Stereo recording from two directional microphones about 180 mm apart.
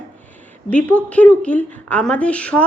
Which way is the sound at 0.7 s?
5° left (ahead or behind).